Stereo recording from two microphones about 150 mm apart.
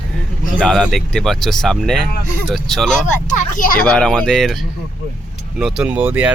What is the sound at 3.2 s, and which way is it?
Speech, 65° left (ahead or behind).